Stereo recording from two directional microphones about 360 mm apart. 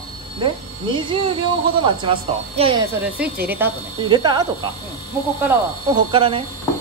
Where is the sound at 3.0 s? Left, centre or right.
Centre.